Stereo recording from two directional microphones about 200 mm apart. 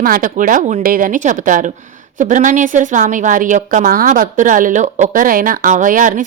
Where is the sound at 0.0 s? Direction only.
45° right (ahead or behind).